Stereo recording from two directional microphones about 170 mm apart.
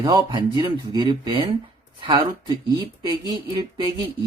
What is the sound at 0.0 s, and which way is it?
Speech, 30° right (ahead or behind).